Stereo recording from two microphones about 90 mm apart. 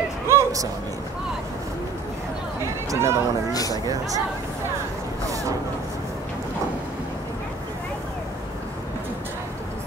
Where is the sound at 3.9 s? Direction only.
40° right (ahead or behind).